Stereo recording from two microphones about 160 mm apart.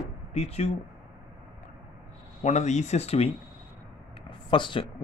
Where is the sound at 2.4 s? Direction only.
45° left (ahead or behind).